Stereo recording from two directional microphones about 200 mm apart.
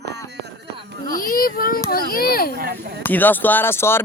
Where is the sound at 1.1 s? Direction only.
45° left (ahead or behind).